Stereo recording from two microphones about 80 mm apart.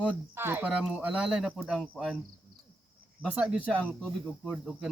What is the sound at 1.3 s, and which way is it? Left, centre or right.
Speech, centre.